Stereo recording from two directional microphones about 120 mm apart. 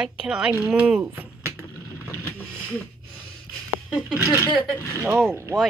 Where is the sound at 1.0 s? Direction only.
20° right (ahead or behind).